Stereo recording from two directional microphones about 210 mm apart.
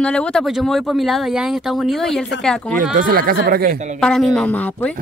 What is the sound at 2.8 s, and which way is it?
Speech, 40° right (ahead or behind).